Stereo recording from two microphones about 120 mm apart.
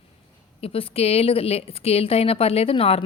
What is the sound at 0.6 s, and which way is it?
Speech, 50° left (ahead or behind).